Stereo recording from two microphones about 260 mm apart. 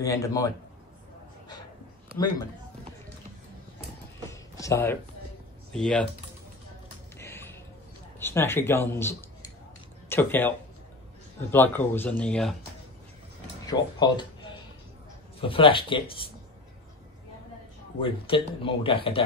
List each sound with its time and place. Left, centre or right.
0.0 s speech: centre
4.3 s a sound: centre
5.7 s speech: centre
7.2 s a sound: centre
8.2 s speech: centre
11.5 s speech: centre
13.7 s speech: centre
15.4 s speech: centre
18.0 s speech: centre